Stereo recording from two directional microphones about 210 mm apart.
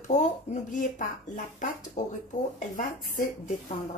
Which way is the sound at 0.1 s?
35° left (ahead or behind).